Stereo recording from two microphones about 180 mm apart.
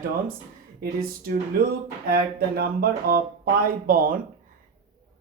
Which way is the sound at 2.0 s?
60° right (ahead or behind).